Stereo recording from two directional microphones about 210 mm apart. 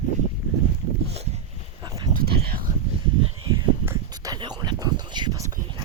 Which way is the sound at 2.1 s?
50° right (ahead or behind).